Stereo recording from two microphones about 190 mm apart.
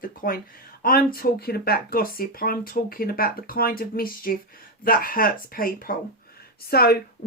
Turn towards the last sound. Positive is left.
turn(degrees=55)  # may be behind; listen again after turning